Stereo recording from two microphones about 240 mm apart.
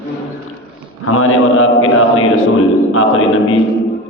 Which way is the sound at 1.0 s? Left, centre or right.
Left.